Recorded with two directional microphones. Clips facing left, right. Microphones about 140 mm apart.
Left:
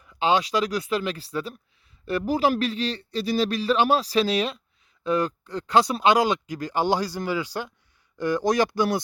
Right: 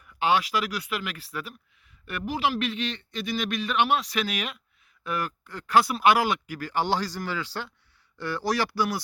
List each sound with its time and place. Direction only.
0.0 s speech: 20° left (ahead or behind)